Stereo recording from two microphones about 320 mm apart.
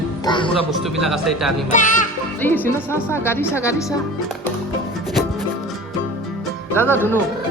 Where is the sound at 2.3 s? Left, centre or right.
Centre.